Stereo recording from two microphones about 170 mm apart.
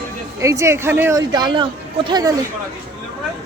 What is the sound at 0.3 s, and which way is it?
Speech, 20° right (ahead or behind).